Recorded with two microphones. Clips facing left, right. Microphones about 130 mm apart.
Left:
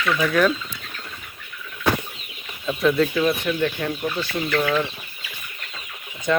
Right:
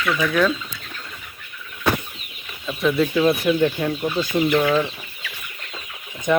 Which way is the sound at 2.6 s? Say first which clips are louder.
Left 1 dB; centre (ahead or behind).